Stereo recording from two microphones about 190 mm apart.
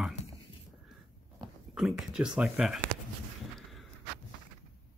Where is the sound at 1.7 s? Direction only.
Centre (ahead or behind).